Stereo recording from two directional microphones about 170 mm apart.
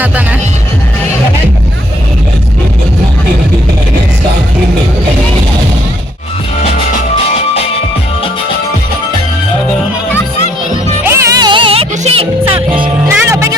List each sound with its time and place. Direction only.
11.0 s music: 15° right (ahead or behind); by 12.9 s 30° right (ahead or behind)
13.1 s music: 15° right (ahead or behind)